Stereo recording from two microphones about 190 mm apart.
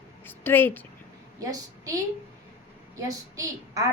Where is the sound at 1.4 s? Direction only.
20° right (ahead or behind).